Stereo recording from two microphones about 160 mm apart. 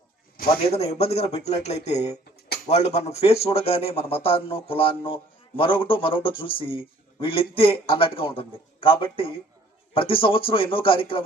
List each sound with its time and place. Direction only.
0.7 s speech: 40° left (ahead or behind)